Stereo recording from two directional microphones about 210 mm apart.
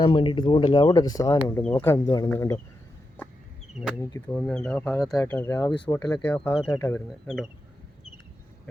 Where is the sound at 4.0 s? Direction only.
10° left (ahead or behind).